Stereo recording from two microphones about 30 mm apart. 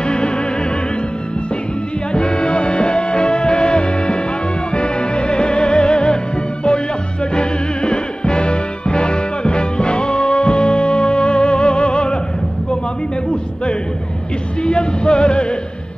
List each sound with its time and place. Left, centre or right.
0.0 s music: left
2.1 s music: left
7.3 s music: left
14.6 s music: left